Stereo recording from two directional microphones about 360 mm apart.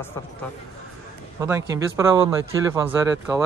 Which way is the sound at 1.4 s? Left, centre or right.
Centre.